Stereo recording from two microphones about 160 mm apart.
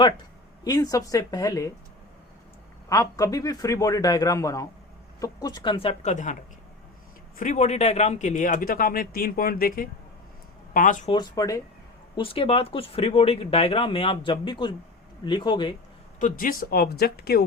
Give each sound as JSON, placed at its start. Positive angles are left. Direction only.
{"t": 0.6, "sound": "a man's voice", "side_deg": 20}
{"t": 2.9, "sound": "a man's voice", "side_deg": 20}
{"t": 7.3, "sound": "speech", "side_deg": 50}
{"t": 11.1, "sound": "a man's voice", "side_deg": 25}
{"t": 12.1, "sound": "a man's voice", "side_deg": 35}
{"t": 16.2, "sound": "speech", "side_deg": 60}